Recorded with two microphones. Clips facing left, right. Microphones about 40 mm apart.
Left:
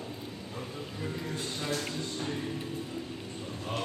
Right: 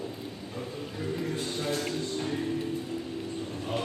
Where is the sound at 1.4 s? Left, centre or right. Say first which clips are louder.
Right 4 dB; right.